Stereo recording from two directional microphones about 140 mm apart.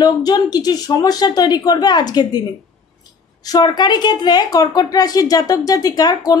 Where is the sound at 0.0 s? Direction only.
30° left (ahead or behind).